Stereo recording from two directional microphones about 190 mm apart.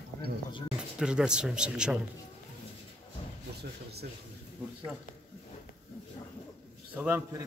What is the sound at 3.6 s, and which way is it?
Speech, 55° right (ahead or behind).